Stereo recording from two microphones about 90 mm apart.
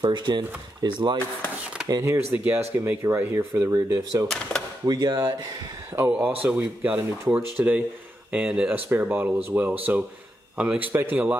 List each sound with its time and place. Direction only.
0.0 s speech: 60° right (ahead or behind)
2.0 s speech: 25° right (ahead or behind)
3.7 s speech: 40° right (ahead or behind)
4.3 s speech: 5° left (ahead or behind)
4.8 s speech: 50° right (ahead or behind)
5.9 s speech: 20° right (ahead or behind)